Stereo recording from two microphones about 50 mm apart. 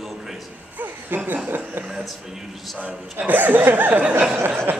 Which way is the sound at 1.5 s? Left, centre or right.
Right.